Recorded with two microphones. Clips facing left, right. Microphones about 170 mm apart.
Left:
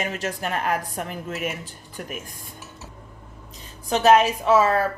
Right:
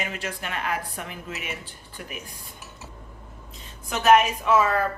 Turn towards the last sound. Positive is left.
turn(degrees=35)  # may be behind; listen again after turning